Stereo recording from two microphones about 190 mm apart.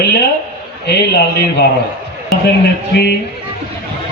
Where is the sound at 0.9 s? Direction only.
60° left (ahead or behind).